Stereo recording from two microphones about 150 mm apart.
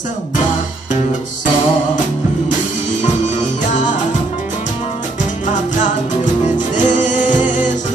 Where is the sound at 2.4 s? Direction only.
55° left (ahead or behind).